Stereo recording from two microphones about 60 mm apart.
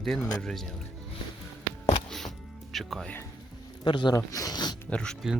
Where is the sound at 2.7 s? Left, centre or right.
Centre.